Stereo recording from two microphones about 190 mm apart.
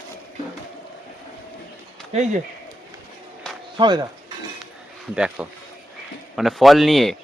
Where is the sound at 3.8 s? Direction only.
25° right (ahead or behind).